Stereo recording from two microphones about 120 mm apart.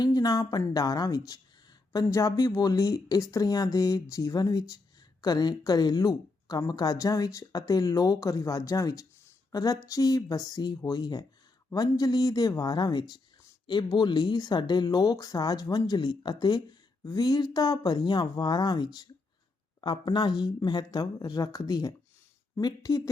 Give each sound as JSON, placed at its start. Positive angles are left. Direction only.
{"t": 0.0, "sound": "speech", "side_deg": 30}